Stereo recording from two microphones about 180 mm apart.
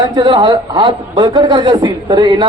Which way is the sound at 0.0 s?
25° right (ahead or behind).